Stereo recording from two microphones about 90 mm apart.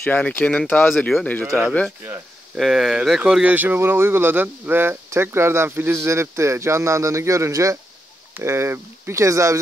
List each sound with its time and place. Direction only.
0.0 s speech: 20° left (ahead or behind)
2.5 s speech: centre (ahead or behind); by 9.6 s 35° right (ahead or behind)